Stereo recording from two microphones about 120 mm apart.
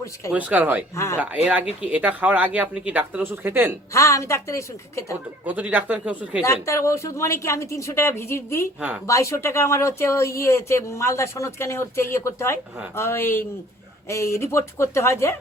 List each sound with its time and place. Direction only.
0.3 s speech: 15° right (ahead or behind)
0.9 s speech: 25° left (ahead or behind)
1.2 s speech: 10° right (ahead or behind)
3.9 s speech: 25° left (ahead or behind)
5.5 s speech: 15° right (ahead or behind)
6.4 s speech: 25° left (ahead or behind)